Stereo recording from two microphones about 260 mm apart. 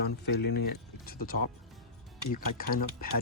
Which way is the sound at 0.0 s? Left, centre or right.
Left.